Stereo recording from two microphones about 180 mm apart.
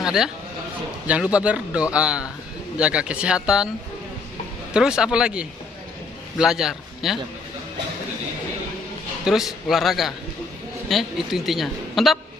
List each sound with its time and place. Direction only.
0.0 s a man's voice: 5° right (ahead or behind)
4.7 s a man's voice: 5° right (ahead or behind)
9.2 s a man's voice: centre (ahead or behind)